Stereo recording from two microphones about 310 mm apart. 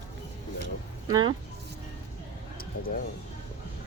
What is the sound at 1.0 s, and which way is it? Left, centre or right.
Speech, centre.